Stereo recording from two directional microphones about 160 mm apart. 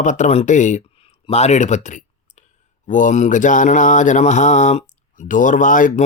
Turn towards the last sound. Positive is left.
turn(degrees=55)  # may be behind; listen again after turning